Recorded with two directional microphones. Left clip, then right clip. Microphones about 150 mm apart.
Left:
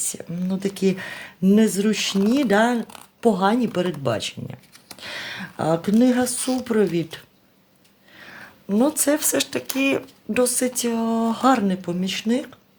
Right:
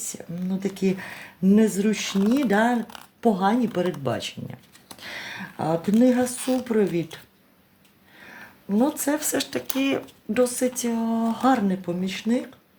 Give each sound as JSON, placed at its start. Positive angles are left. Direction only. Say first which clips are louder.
{"t": 0.0, "sound": "speech", "louder": "left 4 dB", "side_deg": 50}
{"t": 8.2, "sound": "speech", "louder": "left 2 dB", "side_deg": 45}